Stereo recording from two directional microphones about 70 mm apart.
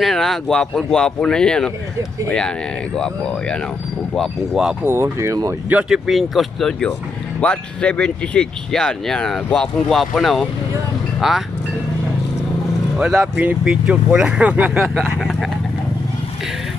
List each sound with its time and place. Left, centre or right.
0.0 s speech: centre
3.0 s speech: centre
4.8 s speech: right
5.9 s speech: centre
7.3 s speech: centre
12.9 s speech: centre
14.8 s speech: centre